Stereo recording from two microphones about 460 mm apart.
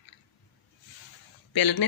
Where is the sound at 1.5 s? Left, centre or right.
Left.